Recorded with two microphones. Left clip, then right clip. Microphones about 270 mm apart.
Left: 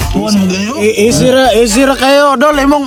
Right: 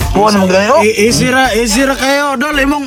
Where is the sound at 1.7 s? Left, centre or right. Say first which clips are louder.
Left 4 dB; centre.